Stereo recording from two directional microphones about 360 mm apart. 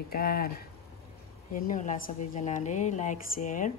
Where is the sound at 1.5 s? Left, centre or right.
Left.